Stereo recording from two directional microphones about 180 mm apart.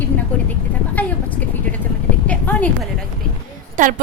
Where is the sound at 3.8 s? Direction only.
45° right (ahead or behind).